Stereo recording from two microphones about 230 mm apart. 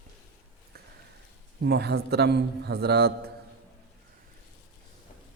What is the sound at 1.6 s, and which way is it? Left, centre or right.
A man's voice, right.